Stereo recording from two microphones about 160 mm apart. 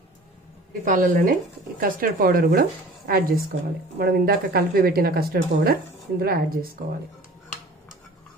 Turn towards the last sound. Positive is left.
turn(degrees=-70)  # may be behind; listen again after turning